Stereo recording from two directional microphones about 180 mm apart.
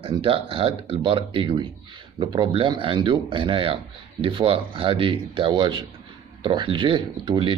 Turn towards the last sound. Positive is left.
turn(degrees=-30)  # may be behind; listen again after turning